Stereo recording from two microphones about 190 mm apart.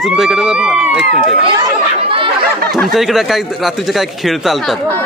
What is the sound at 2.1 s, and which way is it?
Chatter, 25° right (ahead or behind).